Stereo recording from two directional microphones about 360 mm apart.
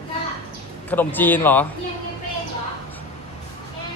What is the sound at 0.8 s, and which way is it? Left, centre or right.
Speech, centre.